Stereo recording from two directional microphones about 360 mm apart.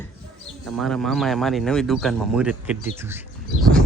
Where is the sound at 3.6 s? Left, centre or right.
Centre.